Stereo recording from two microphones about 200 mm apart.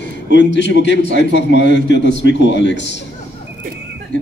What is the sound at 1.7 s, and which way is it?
Speech, 45° right (ahead or behind).